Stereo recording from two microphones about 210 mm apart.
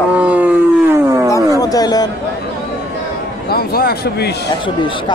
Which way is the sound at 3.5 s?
45° left (ahead or behind).